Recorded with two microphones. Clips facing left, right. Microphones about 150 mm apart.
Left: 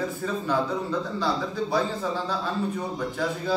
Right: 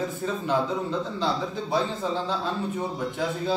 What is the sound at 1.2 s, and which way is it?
A man's voice, 20° right (ahead or behind).